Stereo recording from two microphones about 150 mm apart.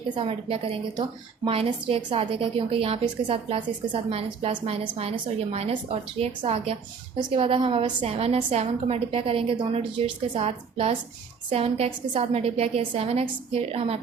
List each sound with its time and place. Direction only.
0.2 s a woman's voice: 40° right (ahead or behind)